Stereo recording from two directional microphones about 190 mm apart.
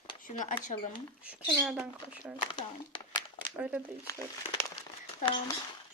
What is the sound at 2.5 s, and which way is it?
Speech, 25° left (ahead or behind).